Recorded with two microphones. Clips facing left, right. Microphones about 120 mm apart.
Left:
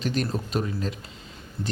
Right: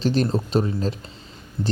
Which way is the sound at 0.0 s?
30° right (ahead or behind).